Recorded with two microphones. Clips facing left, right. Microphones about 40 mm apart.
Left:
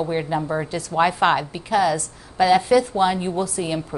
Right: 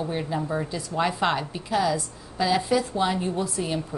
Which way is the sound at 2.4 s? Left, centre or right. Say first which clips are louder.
Left 7 dB; left.